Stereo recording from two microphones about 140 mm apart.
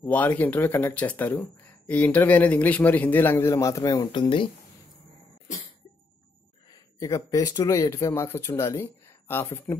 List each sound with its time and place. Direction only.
0.0 s speech: 10° left (ahead or behind); by 4.5 s 35° left (ahead or behind)
7.0 s speech: 25° left (ahead or behind)